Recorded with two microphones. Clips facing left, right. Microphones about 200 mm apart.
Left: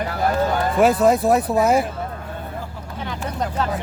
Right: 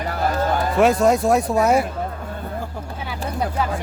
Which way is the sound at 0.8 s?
Centre (ahead or behind).